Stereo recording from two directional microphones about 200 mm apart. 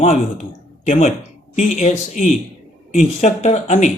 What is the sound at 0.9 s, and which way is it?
Speech, 35° left (ahead or behind).